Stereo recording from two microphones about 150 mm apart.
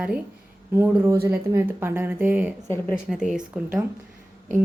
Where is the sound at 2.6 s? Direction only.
15° left (ahead or behind).